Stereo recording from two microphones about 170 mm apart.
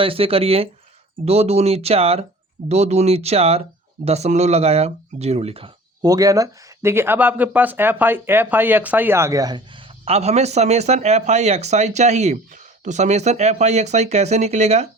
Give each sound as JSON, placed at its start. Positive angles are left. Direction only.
{"t": 0.0, "sound": "speech", "side_deg": -35}
{"t": 10.1, "sound": "speech", "side_deg": -40}